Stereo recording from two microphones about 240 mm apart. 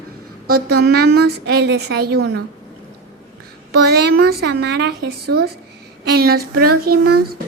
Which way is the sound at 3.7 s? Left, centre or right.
Right.